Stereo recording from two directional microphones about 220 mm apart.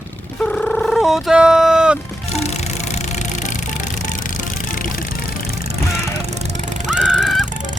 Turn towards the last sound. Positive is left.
turn(degrees=-5)  # may be behind; listen again after turning